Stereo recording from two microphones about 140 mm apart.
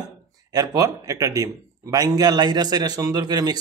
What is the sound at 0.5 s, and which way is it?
A man's voice, 25° right (ahead or behind).